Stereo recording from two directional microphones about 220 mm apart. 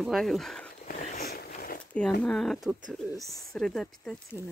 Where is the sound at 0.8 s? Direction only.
35° left (ahead or behind).